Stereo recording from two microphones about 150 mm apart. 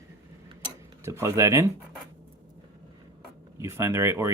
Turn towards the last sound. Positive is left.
turn(degrees=-20)  # may be behind; listen again after turning